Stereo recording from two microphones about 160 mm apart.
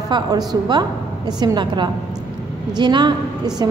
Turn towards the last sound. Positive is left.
turn(degrees=-25)  # may be behind; listen again after turning